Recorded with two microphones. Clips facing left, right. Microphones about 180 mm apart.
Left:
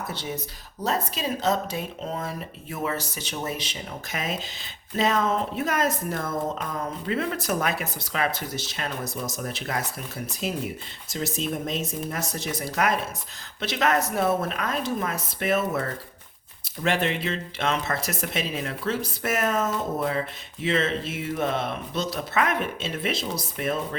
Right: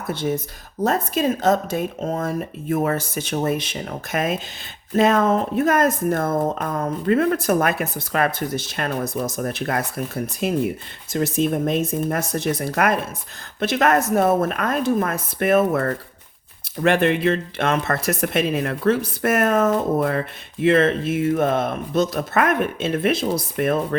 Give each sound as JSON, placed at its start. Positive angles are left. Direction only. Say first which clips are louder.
{"t": 0.1, "sound": "speech", "louder": "right 9 dB", "side_deg": -50}